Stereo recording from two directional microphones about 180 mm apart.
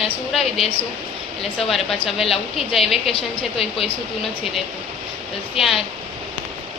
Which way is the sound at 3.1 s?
30° left (ahead or behind).